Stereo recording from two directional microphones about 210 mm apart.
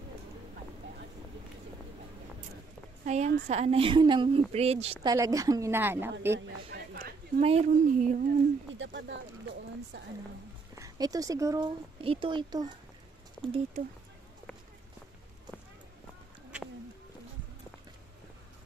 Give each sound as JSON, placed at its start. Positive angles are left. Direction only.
{"t": 3.1, "sound": "speech", "side_deg": -30}
{"t": 5.0, "sound": "a woman's voice", "side_deg": -15}
{"t": 6.4, "sound": "a sound", "side_deg": -50}
{"t": 7.4, "sound": "a woman's voice", "side_deg": -35}
{"t": 8.7, "sound": "speech", "side_deg": -60}
{"t": 10.8, "sound": "speech", "side_deg": -15}
{"t": 13.4, "sound": "speech", "side_deg": 5}